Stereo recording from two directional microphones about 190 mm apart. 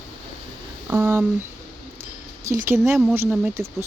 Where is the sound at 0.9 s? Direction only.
10° right (ahead or behind).